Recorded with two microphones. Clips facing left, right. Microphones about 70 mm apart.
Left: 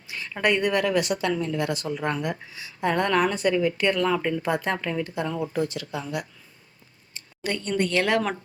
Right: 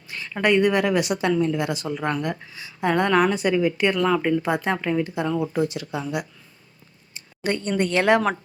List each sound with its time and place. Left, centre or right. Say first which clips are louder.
0.1 s a woman's voice: right 3 dB; centre
0.8 s speech: right 2 dB; centre
3.1 s speech: right 3 dB; centre
5.8 s speech: right 3 dB; right
7.4 s speech: right 3 dB; right